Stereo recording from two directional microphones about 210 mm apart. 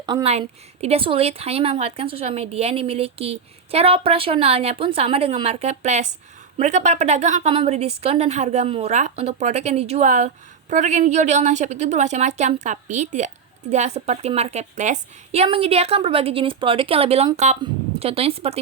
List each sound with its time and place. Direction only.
0.0 s a woman's voice: 20° right (ahead or behind)